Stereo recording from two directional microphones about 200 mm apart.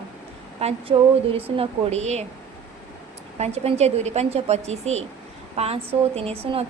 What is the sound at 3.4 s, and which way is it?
A woman's voice, 30° right (ahead or behind).